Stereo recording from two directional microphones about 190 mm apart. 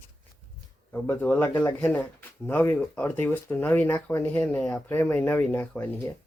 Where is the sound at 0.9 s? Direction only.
10° left (ahead or behind).